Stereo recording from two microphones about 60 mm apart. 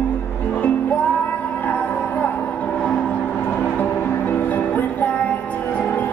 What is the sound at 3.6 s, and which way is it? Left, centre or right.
Music, left.